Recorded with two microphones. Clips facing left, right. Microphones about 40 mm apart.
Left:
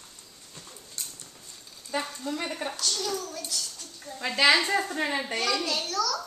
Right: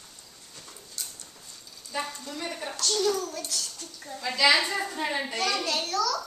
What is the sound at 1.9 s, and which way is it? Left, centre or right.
Speech, left.